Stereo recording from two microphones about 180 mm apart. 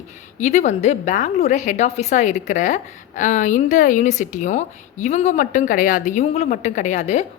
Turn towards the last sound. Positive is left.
turn(degrees=40)  # may be behind; listen again after turning